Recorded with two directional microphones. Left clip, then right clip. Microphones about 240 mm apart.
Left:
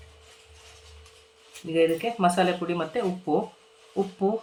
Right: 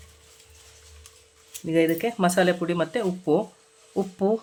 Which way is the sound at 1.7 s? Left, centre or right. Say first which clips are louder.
Right 1 dB; right.